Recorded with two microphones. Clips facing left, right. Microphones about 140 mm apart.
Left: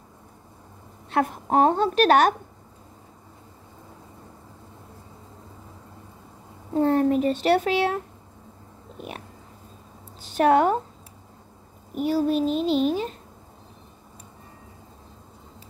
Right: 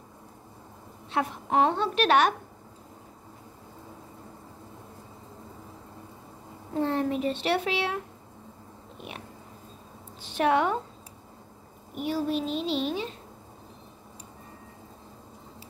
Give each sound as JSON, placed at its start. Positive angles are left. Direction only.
{"t": 1.1, "sound": "speech", "side_deg": 40}
{"t": 6.8, "sound": "a child's voice", "side_deg": 45}
{"t": 10.2, "sound": "a woman's voice", "side_deg": 40}
{"t": 11.9, "sound": "a child's voice", "side_deg": 40}